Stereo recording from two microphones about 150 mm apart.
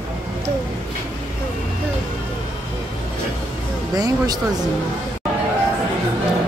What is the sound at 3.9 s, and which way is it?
Speech, 25° right (ahead or behind).